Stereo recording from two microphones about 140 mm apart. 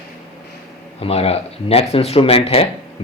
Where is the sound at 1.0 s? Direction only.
45° left (ahead or behind).